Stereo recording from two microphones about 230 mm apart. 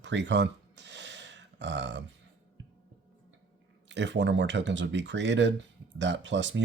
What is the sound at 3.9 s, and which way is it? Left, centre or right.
Speech, right.